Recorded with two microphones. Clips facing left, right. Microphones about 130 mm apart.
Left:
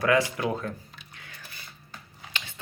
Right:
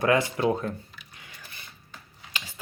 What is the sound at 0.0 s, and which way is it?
Speech, 25° right (ahead or behind).